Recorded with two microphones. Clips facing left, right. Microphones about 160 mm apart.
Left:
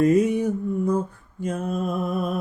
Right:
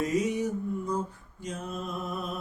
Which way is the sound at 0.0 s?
55° left (ahead or behind).